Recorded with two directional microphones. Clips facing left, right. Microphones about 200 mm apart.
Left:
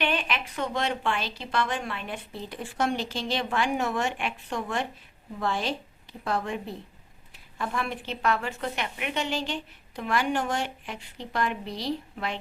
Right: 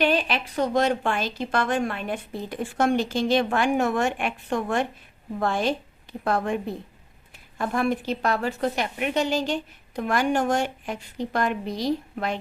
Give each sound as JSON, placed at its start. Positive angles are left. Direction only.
{"t": 0.0, "sound": "a woman's voice", "side_deg": -35}